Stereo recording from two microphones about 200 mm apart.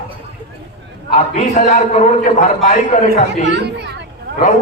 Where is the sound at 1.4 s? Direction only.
35° left (ahead or behind).